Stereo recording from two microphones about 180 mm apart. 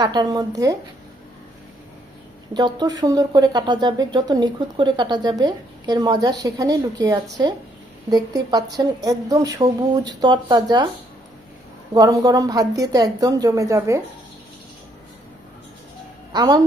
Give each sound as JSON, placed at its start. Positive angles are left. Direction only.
{"t": 0.0, "sound": "speech", "side_deg": -20}
{"t": 2.5, "sound": "speech", "side_deg": -25}
{"t": 11.9, "sound": "speech", "side_deg": -20}
{"t": 16.3, "sound": "a woman's voice", "side_deg": -25}